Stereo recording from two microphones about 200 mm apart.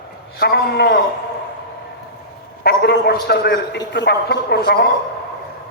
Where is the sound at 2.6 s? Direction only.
55° left (ahead or behind).